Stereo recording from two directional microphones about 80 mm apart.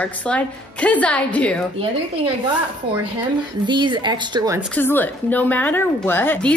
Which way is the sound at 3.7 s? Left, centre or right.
Right.